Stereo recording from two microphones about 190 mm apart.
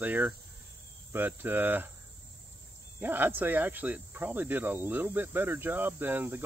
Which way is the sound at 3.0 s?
10° right (ahead or behind).